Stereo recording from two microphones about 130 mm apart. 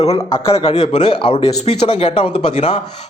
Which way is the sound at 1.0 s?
40° left (ahead or behind).